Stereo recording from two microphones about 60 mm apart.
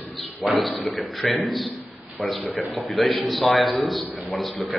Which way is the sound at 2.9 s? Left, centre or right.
Centre.